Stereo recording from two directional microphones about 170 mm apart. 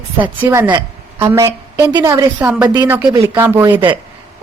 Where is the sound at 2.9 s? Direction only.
10° right (ahead or behind).